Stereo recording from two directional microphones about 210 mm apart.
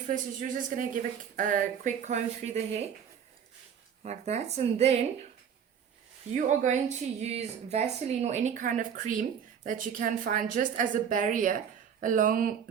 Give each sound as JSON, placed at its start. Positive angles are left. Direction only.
{"t": 0.1, "sound": "a woman's voice", "side_deg": -40}
{"t": 4.0, "sound": "a woman's voice", "side_deg": -30}
{"t": 6.3, "sound": "a woman's voice", "side_deg": -35}